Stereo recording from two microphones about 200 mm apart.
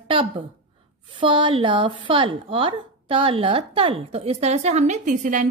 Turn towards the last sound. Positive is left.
turn(degrees=-40)  # may be behind; listen again after turning